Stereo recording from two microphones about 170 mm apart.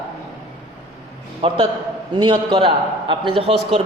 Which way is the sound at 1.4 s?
35° right (ahead or behind).